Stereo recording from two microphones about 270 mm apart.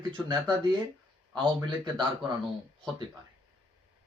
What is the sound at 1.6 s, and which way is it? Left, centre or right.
Speech, centre.